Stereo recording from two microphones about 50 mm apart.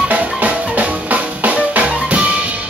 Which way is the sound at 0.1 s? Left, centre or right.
Right.